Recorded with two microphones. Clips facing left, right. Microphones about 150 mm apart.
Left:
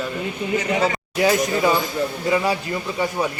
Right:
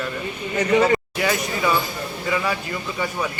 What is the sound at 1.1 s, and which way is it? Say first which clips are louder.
A man's voice: left 5 dB; 30° left (ahead or behind).